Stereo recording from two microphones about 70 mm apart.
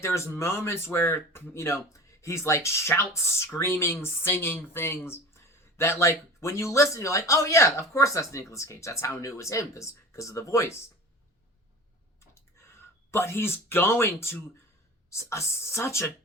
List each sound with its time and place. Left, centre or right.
0.0 s speech: left
13.1 s speech: left